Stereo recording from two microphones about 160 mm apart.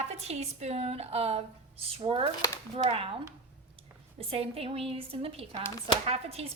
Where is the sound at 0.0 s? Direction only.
45° right (ahead or behind).